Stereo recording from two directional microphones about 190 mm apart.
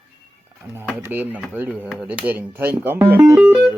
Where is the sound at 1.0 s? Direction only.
10° right (ahead or behind).